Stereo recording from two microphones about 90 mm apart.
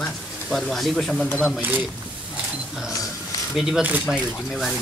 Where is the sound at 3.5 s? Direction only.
5° right (ahead or behind).